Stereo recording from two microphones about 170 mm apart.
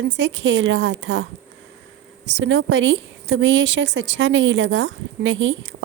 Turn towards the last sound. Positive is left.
turn(degrees=-90)